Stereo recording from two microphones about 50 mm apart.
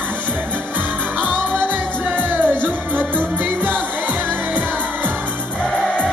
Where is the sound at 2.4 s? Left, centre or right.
Right.